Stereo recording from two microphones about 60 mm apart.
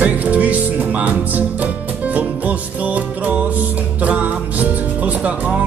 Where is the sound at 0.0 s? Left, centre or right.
Right.